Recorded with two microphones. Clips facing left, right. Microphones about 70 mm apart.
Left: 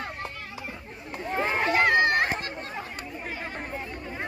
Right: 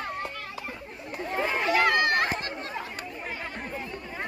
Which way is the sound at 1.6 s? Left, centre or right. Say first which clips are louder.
Left 1 dB; left.